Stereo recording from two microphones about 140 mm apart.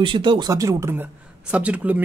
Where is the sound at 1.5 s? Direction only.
10° right (ahead or behind).